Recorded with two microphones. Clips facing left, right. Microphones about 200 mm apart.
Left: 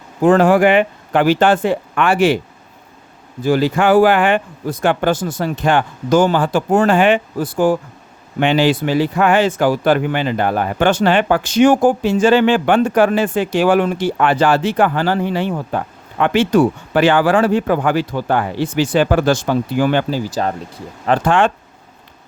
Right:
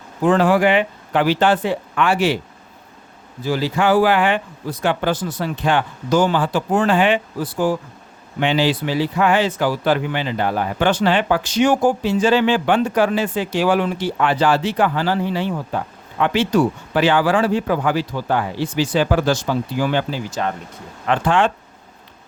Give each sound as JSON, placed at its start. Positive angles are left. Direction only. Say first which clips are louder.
{"t": 0.2, "sound": "speech", "louder": "left 4 dB", "side_deg": 45}
{"t": 3.4, "sound": "speech", "louder": "left 4 dB", "side_deg": 55}
{"t": 20.1, "sound": "speech", "louder": "left 4 dB", "side_deg": 35}
{"t": 21.1, "sound": "speech", "louder": "left 3 dB", "side_deg": 50}